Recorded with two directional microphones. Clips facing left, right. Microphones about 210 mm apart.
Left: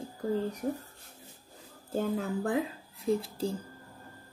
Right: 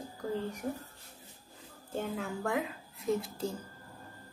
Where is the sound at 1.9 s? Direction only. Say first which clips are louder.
Left 5 dB; 35° left (ahead or behind).